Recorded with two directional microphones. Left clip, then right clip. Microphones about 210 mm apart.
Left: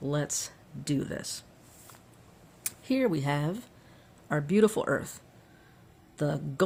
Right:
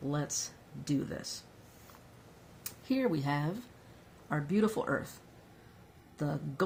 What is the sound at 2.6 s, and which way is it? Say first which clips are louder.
Speech: left 5 dB; 45° left (ahead or behind).